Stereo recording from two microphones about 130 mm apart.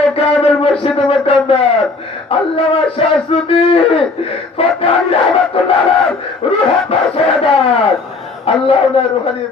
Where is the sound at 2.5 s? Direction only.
45° left (ahead or behind).